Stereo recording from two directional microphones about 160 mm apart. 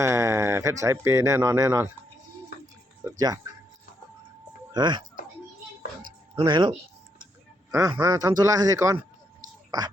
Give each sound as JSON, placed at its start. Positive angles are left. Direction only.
{"t": 0.0, "sound": "speech", "side_deg": -20}
{"t": 3.0, "sound": "music", "side_deg": -25}
{"t": 4.7, "sound": "speech", "side_deg": -30}
{"t": 6.4, "sound": "speech", "side_deg": -25}